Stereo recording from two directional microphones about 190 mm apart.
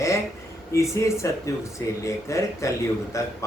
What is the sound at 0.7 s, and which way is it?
Speech, 15° left (ahead or behind).